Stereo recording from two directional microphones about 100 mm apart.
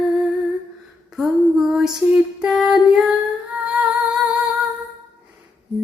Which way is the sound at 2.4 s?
5° right (ahead or behind).